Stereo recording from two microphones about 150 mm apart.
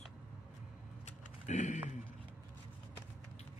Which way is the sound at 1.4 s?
50° left (ahead or behind).